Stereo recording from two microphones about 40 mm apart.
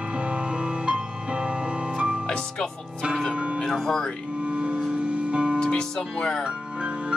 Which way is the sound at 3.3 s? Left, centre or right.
Right.